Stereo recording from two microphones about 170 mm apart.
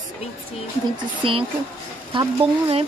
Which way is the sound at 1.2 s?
30° right (ahead or behind).